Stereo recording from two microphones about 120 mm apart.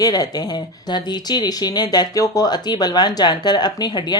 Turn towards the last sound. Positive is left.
turn(degrees=35)  # may be behind; listen again after turning